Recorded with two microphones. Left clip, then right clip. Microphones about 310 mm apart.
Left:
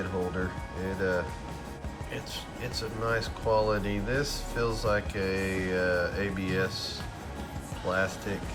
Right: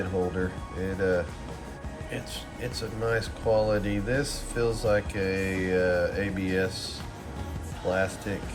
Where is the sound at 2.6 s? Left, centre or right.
Centre.